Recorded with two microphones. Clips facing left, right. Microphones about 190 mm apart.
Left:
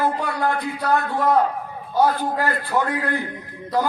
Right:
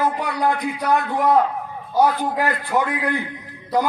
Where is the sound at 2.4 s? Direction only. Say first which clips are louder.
Right 3 dB; 15° right (ahead or behind).